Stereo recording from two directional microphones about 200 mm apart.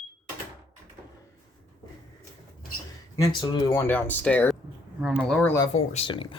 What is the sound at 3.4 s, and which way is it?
Speech, 20° left (ahead or behind).